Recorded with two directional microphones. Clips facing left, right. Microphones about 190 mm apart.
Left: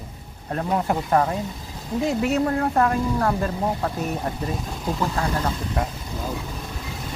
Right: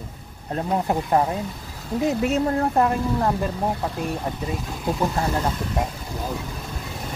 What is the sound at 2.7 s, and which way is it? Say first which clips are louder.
Speech: even; 20° right (ahead or behind).